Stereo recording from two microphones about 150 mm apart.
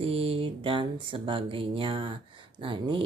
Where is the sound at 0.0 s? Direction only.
40° right (ahead or behind).